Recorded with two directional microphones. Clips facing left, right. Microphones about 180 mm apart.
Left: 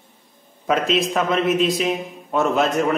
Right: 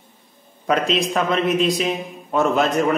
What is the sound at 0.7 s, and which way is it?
A man's voice, 5° left (ahead or behind).